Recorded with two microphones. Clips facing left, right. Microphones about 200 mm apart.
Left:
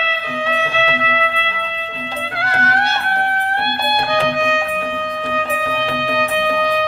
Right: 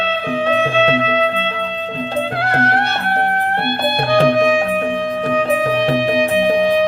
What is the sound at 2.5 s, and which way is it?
Music, 60° right (ahead or behind).